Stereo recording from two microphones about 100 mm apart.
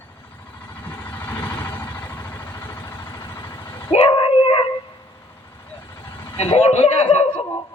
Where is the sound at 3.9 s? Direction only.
65° left (ahead or behind).